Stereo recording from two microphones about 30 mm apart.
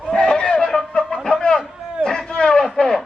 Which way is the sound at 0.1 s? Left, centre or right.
Left.